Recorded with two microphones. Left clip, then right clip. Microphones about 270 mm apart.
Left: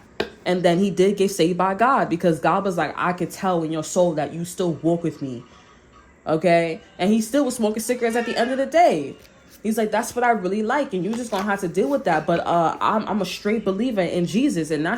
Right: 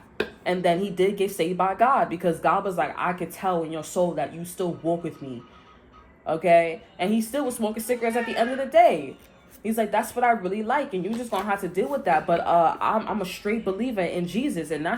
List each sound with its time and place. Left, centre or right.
0.4 s a woman's voice: left
6.2 s a woman's voice: left